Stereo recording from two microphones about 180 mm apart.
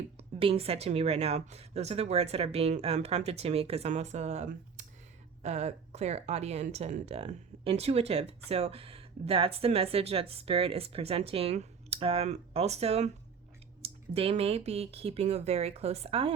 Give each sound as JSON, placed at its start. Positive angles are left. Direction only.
{"t": 0.2, "sound": "speech", "side_deg": -30}